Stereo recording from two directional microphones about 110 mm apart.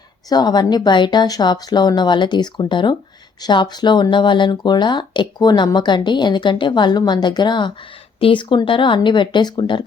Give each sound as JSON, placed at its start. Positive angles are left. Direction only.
{"t": 0.3, "sound": "speech", "side_deg": 40}